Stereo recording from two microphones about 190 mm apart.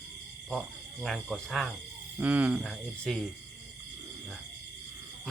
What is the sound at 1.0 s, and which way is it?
Speech, centre (ahead or behind).